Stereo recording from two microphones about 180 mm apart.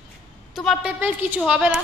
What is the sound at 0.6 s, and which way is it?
A woman's voice, 5° right (ahead or behind).